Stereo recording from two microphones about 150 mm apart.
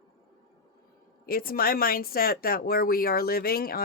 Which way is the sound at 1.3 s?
80° left.